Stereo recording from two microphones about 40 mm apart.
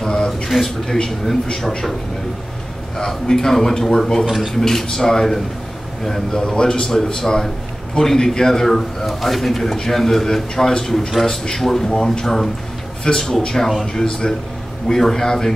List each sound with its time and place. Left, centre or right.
0.0 s a sound: centre
0.5 s speech: centre
3.0 s speech: centre
4.3 s speech: centre
4.6 s speech: centre